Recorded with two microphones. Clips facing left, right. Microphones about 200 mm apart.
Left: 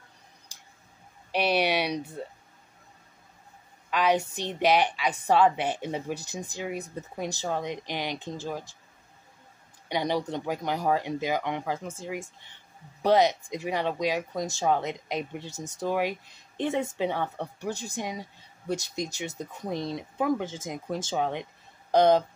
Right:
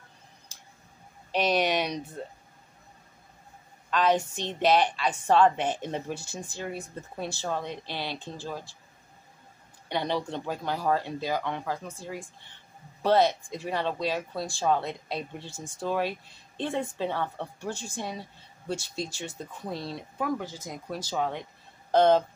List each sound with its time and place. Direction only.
1.3 s speech: 10° left (ahead or behind)
3.9 s speech: 10° left (ahead or behind)
9.8 s speech: 10° left (ahead or behind)